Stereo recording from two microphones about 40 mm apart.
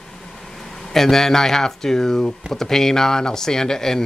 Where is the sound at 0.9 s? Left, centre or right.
Centre.